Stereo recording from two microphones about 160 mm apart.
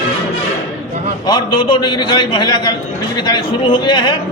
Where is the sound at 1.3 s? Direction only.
25° left (ahead or behind).